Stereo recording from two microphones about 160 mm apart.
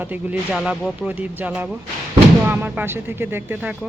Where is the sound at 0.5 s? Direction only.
Centre (ahead or behind).